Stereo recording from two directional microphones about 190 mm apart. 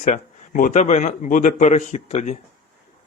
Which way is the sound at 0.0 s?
40° left (ahead or behind).